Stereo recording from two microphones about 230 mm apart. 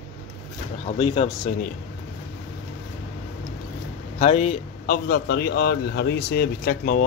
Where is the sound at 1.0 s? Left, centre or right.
Left.